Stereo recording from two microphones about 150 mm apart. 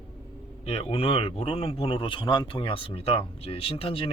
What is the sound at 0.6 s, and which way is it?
Speech, 40° left (ahead or behind).